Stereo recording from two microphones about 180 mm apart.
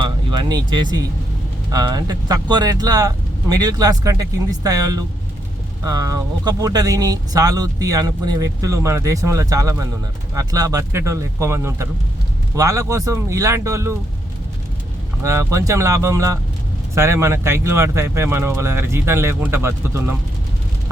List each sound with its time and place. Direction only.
0.0 s music: 25° right (ahead or behind)
1.7 s speech: 20° right (ahead or behind)
15.2 s speech: 15° right (ahead or behind)